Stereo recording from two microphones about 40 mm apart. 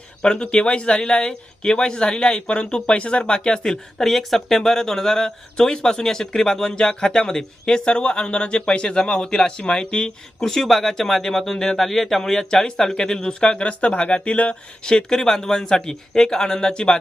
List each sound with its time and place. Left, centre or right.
0.2 s speech: left
13.6 s speech: left
14.8 s speech: centre